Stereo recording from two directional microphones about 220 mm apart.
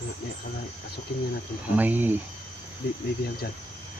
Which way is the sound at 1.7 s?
10° right (ahead or behind).